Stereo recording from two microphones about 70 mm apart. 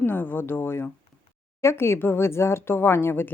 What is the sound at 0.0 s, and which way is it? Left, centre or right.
A woman's voice, left.